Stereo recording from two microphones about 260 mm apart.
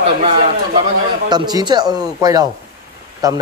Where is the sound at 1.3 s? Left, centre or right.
Centre.